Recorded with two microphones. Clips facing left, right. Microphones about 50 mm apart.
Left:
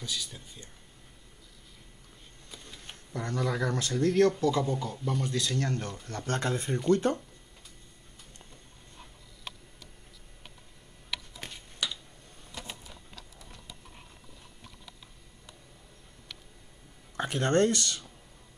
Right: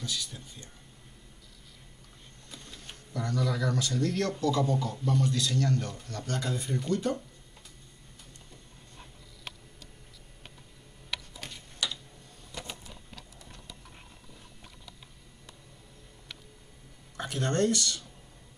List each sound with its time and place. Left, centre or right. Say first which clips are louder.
0.0 s speech: right 1 dB; centre
2.5 s a sound: even; centre
3.2 s speech: even; left; by 5.2 s centre
5.2 s speech: right 2 dB; centre
5.6 s speech: right 3 dB; left
11.4 s a sound: right 1 dB; centre
17.2 s speech: left 3 dB; left